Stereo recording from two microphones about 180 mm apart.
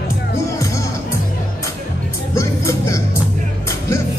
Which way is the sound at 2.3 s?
15° left (ahead or behind).